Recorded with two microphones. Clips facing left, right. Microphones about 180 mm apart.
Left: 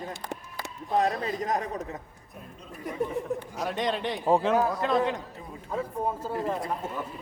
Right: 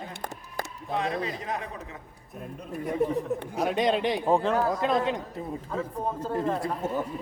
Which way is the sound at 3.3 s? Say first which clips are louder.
Right 4 dB; 55° right (ahead or behind).